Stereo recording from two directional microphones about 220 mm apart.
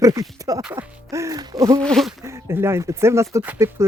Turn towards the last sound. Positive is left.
turn(degrees=-10)  # may be behind; listen again after turning